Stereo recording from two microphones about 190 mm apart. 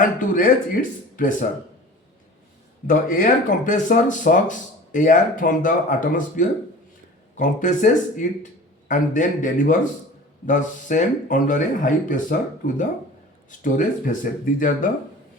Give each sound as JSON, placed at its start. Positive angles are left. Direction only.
{"t": 0.0, "sound": "speech", "side_deg": 45}
{"t": 2.8, "sound": "speech", "side_deg": 45}